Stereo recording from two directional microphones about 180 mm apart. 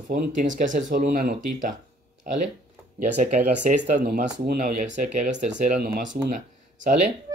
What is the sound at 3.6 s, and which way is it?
Speech, 45° right (ahead or behind).